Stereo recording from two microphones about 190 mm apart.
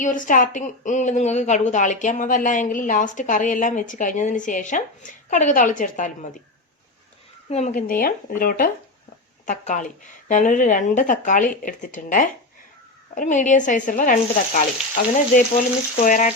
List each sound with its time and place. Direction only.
0.0 s a woman's voice: 45° left (ahead or behind)
7.5 s a woman's voice: 40° left (ahead or behind)